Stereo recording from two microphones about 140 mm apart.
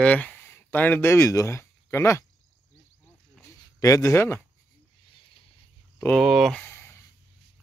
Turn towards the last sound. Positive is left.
turn(degrees=15)  # may be behind; listen again after turning